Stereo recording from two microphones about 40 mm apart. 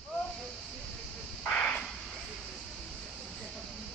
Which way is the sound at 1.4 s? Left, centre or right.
Left.